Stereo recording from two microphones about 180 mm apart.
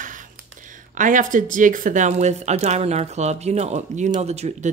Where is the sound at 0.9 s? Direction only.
45° right (ahead or behind).